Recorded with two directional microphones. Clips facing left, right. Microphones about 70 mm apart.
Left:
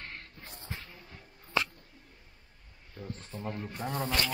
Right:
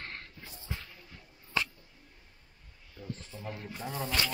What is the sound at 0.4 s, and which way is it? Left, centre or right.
Music, left.